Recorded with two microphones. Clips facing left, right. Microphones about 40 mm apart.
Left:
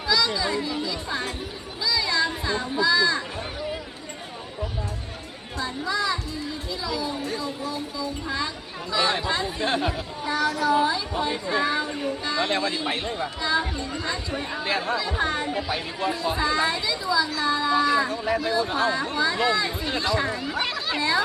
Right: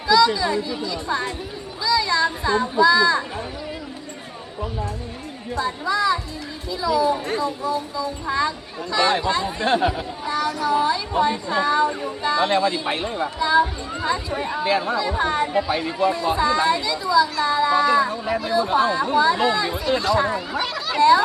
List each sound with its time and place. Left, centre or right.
0.1 s speech: centre
5.5 s speech: centre
11.9 s speech: centre
20.6 s a sound: centre
21.0 s speech: centre